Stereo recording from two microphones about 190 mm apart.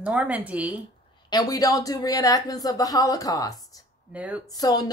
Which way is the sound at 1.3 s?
20° left (ahead or behind).